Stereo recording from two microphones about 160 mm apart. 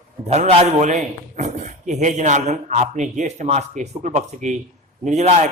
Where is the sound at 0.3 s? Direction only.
45° right (ahead or behind).